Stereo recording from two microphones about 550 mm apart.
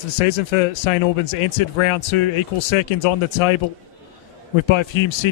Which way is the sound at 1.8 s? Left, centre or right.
Left.